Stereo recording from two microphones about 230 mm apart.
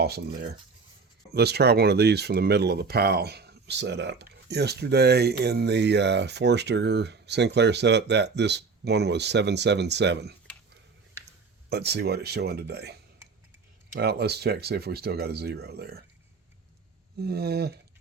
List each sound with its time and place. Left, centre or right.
1.3 s speech: right
11.7 s speech: right
14.0 s speech: right
17.2 s speech: right